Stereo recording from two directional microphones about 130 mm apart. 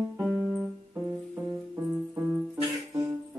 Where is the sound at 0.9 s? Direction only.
20° right (ahead or behind).